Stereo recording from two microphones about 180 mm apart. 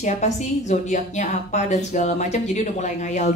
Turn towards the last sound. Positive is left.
turn(degrees=40)  # may be behind; listen again after turning